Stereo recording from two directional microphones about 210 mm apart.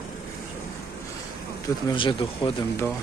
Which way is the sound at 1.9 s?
25° left (ahead or behind).